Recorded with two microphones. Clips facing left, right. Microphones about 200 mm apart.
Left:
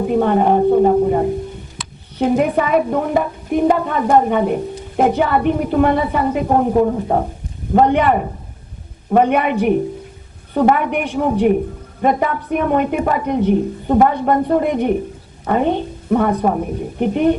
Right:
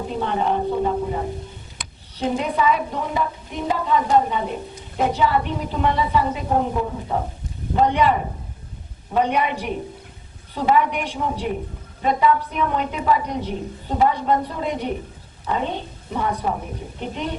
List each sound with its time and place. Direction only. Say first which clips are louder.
0.1 s a woman's voice: left 8 dB; 55° left (ahead or behind)